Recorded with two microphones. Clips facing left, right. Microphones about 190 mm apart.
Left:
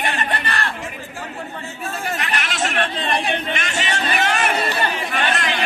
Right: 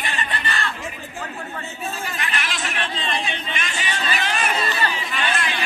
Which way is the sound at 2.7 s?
60° left (ahead or behind).